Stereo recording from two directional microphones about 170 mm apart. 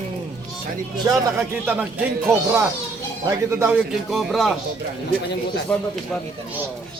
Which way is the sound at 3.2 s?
20° right (ahead or behind).